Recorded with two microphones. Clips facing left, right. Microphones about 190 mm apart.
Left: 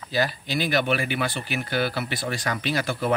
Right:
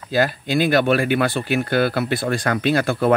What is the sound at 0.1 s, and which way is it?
Speech, 50° right (ahead or behind).